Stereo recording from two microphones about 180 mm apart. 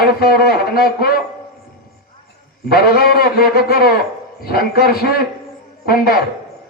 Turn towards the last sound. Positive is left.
turn(degrees=55)  # may be behind; listen again after turning